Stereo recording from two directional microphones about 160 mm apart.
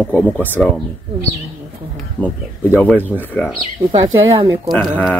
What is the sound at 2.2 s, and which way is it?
Speech, 10° left (ahead or behind).